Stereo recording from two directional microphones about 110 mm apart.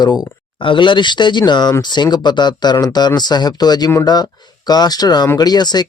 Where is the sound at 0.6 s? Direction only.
50° left (ahead or behind).